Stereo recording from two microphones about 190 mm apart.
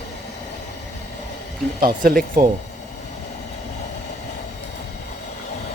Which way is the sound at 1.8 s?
50° right (ahead or behind).